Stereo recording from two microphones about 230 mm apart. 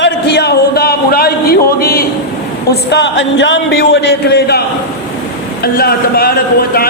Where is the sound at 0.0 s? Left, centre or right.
Left.